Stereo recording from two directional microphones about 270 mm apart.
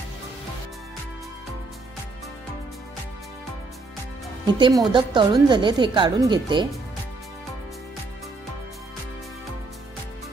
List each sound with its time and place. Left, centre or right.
4.6 s a woman's voice: centre